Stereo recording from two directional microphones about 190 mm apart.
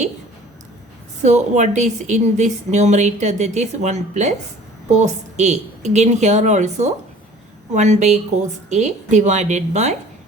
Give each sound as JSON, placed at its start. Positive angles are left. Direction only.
{"t": 1.2, "sound": "a woman's voice", "side_deg": -35}